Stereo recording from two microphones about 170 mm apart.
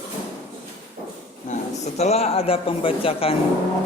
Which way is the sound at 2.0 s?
40° left (ahead or behind).